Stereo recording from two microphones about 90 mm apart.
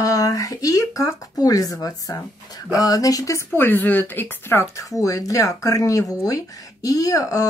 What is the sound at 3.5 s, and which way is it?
A woman's voice, 20° left (ahead or behind).